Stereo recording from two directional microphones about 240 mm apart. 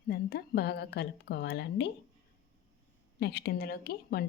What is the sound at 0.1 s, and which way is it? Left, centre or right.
Speech, left.